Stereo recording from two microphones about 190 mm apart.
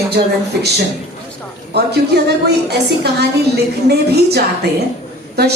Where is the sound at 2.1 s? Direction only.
60° right (ahead or behind).